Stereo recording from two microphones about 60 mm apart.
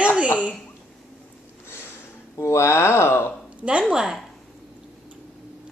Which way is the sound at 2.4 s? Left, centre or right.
Left.